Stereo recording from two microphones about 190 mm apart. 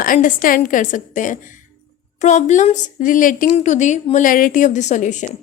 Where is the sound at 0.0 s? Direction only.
45° left (ahead or behind).